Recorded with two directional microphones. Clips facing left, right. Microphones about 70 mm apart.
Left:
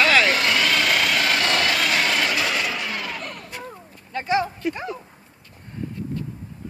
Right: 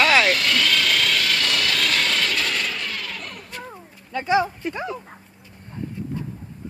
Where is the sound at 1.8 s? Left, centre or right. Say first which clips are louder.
Left 2 dB; centre.